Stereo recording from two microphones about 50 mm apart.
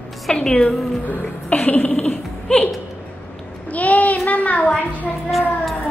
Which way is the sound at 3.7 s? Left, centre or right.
Left.